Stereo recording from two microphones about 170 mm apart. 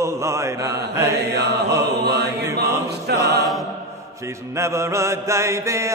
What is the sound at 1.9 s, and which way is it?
Chant, 75° right (ahead or behind).